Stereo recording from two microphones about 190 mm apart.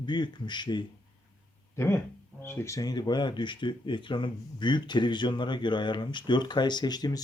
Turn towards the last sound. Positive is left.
turn(degrees=20)  # may be behind; listen again after turning